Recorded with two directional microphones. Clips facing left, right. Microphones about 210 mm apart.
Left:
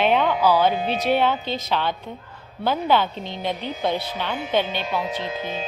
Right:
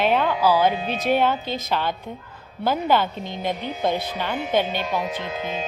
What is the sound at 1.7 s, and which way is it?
A woman's voice, 10° right (ahead or behind).